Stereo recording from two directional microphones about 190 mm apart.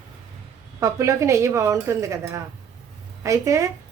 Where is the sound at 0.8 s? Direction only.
15° right (ahead or behind).